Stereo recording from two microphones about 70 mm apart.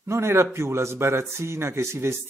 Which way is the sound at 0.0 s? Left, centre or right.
Right.